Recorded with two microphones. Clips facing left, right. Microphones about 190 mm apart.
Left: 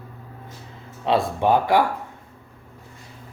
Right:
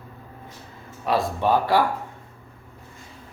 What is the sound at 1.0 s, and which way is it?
Speech, 20° left (ahead or behind).